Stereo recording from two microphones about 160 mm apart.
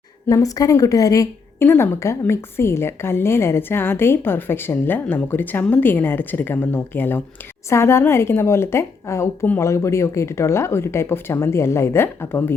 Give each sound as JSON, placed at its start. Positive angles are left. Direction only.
{"t": 0.3, "sound": "a woman's voice", "side_deg": 20}